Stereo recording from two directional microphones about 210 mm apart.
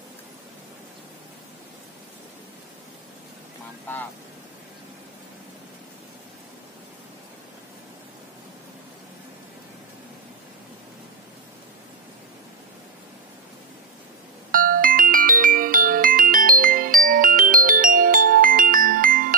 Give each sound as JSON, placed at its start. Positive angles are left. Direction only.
{"t": 14.5, "sound": "music", "side_deg": -40}